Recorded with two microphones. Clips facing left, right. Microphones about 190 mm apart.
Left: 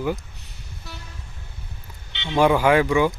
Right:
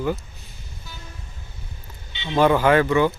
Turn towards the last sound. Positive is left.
turn(degrees=10)  # may be behind; listen again after turning